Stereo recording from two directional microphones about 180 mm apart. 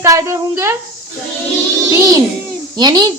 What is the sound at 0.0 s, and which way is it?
Speech, 15° right (ahead or behind).